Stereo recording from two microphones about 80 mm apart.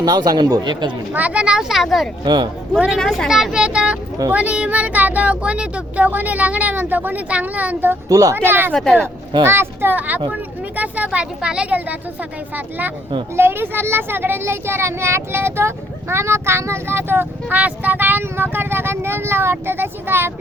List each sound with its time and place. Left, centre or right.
0.0 s speech: right
1.1 s speech: centre
2.2 s speech: right
3.0 s speech: centre
3.2 s speech: centre; by 7.9 s right
8.1 s speech: right
8.4 s speech: right
8.7 s speech: centre
9.4 s speech: right